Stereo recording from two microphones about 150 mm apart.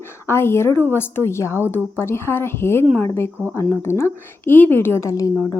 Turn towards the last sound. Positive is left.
turn(degrees=20)  # may be behind; listen again after turning